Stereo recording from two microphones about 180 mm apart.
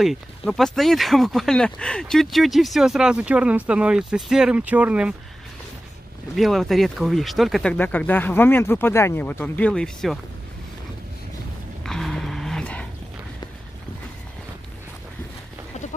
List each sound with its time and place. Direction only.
0.0 s speech: centre (ahead or behind)
6.3 s speech: centre (ahead or behind)
11.8 s a sound: centre (ahead or behind)